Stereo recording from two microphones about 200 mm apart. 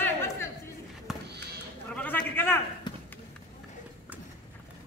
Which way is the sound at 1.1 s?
Centre (ahead or behind).